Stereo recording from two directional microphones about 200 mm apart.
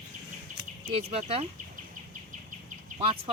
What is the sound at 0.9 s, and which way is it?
Speech, 30° right (ahead or behind).